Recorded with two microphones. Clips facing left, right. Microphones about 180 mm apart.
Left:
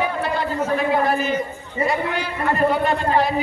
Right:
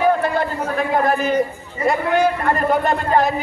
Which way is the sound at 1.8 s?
50° right (ahead or behind).